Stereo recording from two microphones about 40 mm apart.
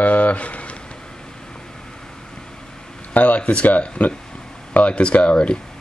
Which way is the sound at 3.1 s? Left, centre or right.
Left.